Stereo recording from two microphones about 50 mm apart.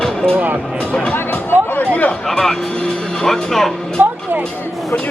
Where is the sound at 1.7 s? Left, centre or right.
Left.